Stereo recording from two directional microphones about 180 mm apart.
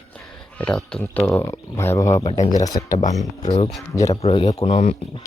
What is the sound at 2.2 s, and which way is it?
Speech, 40° left (ahead or behind).